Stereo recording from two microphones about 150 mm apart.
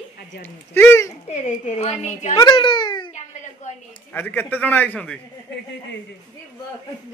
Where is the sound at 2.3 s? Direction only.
30° left (ahead or behind).